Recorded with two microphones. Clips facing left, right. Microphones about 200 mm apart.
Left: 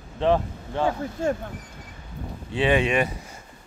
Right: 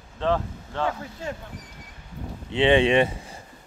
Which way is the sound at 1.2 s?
50° left (ahead or behind).